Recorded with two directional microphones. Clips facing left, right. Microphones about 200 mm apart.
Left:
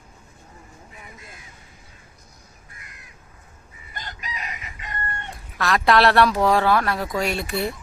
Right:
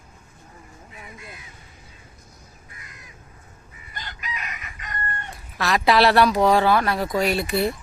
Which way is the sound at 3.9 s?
45° left (ahead or behind).